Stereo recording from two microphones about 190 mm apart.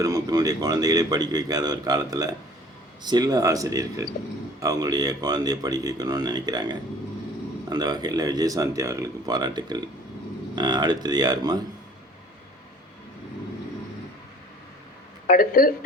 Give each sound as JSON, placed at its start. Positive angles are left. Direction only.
{"t": 0.0, "sound": "a man's voice", "side_deg": -20}
{"t": 15.3, "sound": "speech", "side_deg": 50}